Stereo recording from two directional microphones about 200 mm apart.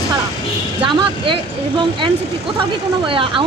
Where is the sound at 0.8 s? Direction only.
25° right (ahead or behind).